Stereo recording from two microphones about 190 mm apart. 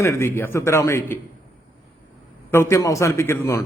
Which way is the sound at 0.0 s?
15° left (ahead or behind).